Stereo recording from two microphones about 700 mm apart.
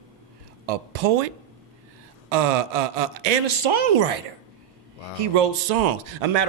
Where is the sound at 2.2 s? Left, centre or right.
Right.